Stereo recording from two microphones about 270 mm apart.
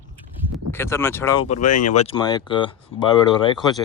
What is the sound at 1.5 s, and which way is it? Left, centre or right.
Speech, left.